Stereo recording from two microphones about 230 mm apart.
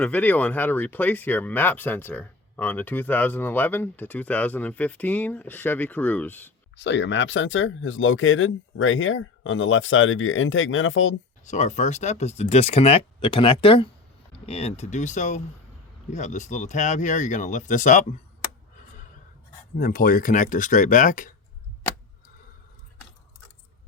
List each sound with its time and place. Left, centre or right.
0.0 s speech: centre
6.7 s speech: left
11.4 s speech: left
19.8 s speech: left